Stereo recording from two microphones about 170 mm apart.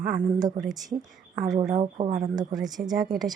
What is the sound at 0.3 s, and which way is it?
Speech, 25° right (ahead or behind).